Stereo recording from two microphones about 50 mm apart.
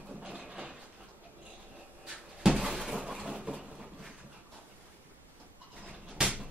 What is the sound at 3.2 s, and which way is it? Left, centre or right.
Vehicle, centre.